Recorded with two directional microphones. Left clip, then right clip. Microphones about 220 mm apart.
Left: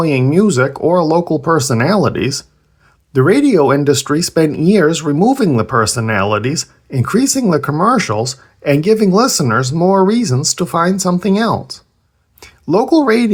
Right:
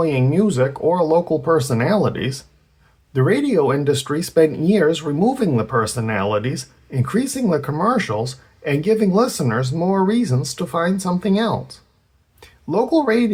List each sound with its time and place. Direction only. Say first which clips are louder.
0.0 s speech: left 5 dB; 25° left (ahead or behind)